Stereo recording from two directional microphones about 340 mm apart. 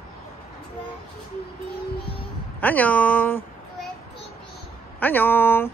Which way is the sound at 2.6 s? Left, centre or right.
Centre.